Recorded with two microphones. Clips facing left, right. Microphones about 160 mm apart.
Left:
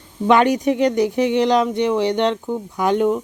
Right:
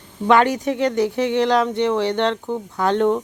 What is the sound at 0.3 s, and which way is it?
Speech, 20° left (ahead or behind).